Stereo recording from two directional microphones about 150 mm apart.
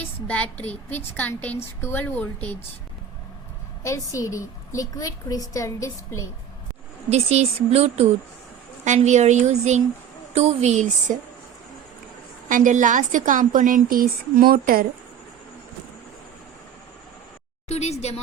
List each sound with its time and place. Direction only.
0.3 s a woman's voice: 10° left (ahead or behind)
3.8 s a woman's voice: 20° left (ahead or behind)
7.1 s speech: 45° right (ahead or behind)
12.5 s a woman's voice: 60° right (ahead or behind); by 14.8 s 75° right (ahead or behind)
17.7 s a woman's voice: 45° left (ahead or behind)